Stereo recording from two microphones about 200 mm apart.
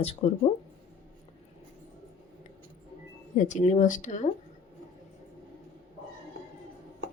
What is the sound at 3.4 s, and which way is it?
Speech, 35° left (ahead or behind).